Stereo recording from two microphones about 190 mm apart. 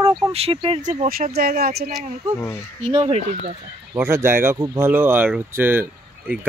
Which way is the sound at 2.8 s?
30° right (ahead or behind).